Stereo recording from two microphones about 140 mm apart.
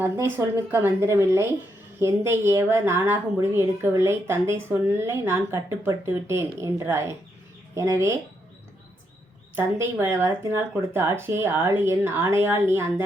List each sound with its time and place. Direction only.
0.0 s a woman's voice: 15° right (ahead or behind)
9.6 s speech: 20° right (ahead or behind)